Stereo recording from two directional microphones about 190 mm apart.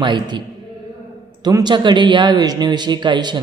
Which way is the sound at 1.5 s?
20° right (ahead or behind).